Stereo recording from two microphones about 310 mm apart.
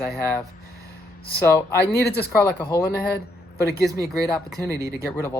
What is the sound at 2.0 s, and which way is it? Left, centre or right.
Speech, left.